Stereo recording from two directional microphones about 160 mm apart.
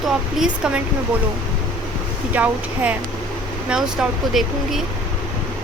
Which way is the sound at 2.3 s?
10° right (ahead or behind).